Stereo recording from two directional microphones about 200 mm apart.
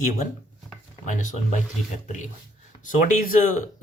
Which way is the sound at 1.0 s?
40° left (ahead or behind).